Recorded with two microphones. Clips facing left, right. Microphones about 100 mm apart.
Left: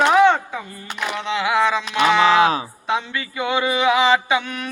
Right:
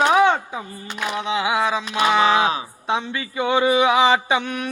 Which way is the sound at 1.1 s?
15° right (ahead or behind).